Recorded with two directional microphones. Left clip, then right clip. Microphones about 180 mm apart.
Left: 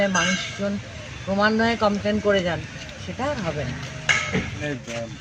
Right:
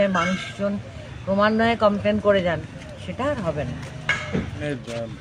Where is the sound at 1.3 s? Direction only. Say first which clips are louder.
Right 1 dB; 25° right (ahead or behind).